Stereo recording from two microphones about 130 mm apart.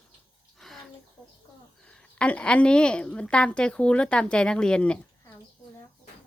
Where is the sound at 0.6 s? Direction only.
Centre (ahead or behind).